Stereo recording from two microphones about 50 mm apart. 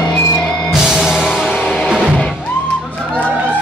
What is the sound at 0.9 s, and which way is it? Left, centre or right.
Music, centre.